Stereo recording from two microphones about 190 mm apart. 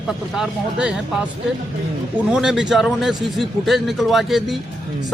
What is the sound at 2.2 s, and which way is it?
A man's voice, 5° right (ahead or behind).